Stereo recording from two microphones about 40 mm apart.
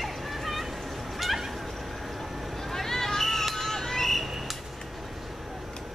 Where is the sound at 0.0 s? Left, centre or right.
Centre.